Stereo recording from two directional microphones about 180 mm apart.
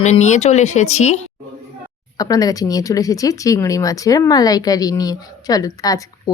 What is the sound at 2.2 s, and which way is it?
Speech, 20° left (ahead or behind).